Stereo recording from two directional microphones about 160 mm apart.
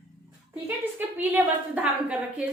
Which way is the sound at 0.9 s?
10° right (ahead or behind).